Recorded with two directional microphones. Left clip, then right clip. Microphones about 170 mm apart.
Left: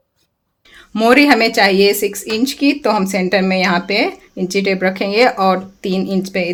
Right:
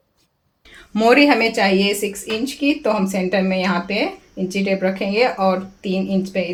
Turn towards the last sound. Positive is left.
turn(degrees=80)